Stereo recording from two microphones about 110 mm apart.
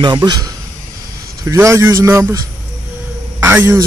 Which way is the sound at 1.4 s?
25° right (ahead or behind).